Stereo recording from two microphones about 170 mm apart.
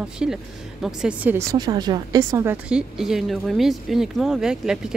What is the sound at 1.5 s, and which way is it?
A woman's voice, 25° right (ahead or behind).